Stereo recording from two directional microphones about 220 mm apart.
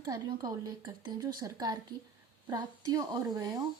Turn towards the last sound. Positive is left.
turn(degrees=-15)  # may be behind; listen again after turning